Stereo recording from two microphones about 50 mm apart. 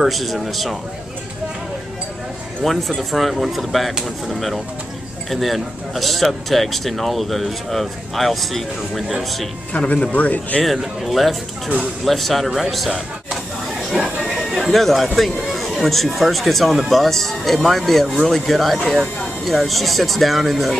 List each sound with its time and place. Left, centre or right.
0.0 s a man's voice: centre
2.6 s a man's voice: centre
9.7 s speech: left
10.6 s a man's voice: centre
13.3 s a sound: centre
14.7 s a man's voice: centre